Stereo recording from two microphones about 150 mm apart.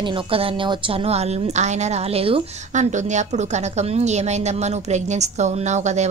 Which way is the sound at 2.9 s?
50° right (ahead or behind).